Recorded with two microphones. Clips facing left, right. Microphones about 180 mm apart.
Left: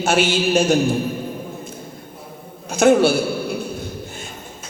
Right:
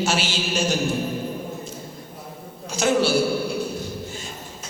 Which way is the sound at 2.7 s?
55° left (ahead or behind).